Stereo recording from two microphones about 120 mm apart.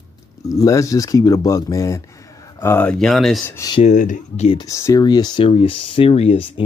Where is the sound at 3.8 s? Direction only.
90° left.